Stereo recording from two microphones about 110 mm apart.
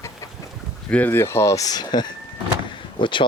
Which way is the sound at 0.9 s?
15° left (ahead or behind).